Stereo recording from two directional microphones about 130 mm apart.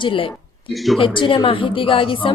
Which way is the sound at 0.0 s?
40° left (ahead or behind).